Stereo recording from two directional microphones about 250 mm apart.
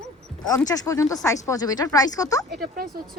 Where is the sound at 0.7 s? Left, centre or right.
Centre.